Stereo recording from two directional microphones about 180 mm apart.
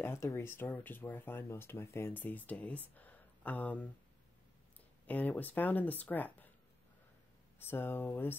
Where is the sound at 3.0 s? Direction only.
10° left (ahead or behind).